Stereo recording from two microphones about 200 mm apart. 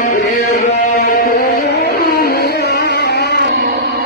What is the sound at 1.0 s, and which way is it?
Music, 45° left (ahead or behind).